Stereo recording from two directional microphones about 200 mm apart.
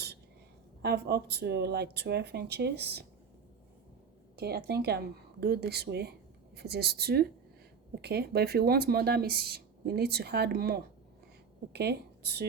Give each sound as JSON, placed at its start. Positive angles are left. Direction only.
{"t": 0.8, "sound": "speech", "side_deg": -55}
{"t": 4.4, "sound": "speech", "side_deg": -55}